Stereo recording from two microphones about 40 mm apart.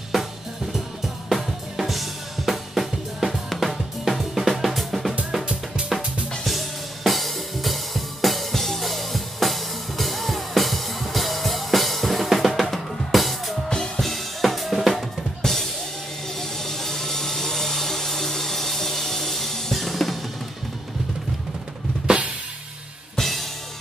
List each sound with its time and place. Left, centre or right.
1.3 s drum kit: centre
6.4 s music: centre
12.7 s drum kit: centre
16.3 s music: centre
22.0 s drum kit: right
23.1 s music: centre